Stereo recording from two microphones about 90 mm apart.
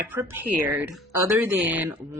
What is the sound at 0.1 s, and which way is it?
Speech, 25° right (ahead or behind).